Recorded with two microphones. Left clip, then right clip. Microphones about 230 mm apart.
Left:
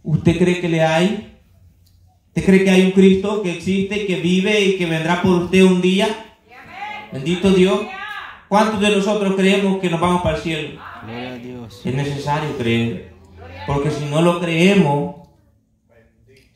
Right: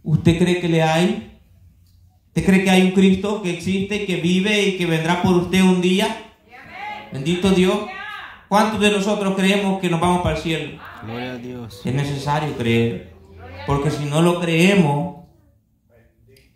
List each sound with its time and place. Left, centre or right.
0.2 s speech: right
2.3 s speech: right
7.1 s speech: right
11.1 s speech: centre
11.8 s speech: right